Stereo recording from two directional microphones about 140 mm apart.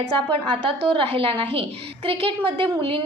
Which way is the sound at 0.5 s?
40° right (ahead or behind).